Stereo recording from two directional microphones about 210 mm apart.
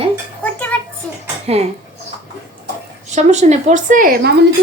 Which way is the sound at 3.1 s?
35° right (ahead or behind).